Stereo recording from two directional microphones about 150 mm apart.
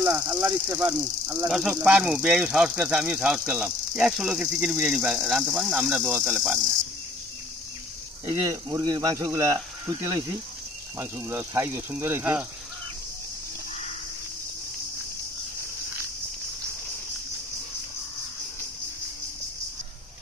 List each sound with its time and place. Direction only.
0.0 s speech: 15° right (ahead or behind)
8.3 s speech: 25° right (ahead or behind)
11.0 s speech: 15° right (ahead or behind)